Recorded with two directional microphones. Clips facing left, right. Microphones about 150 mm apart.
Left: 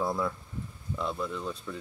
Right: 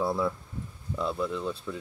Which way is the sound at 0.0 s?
5° right (ahead or behind).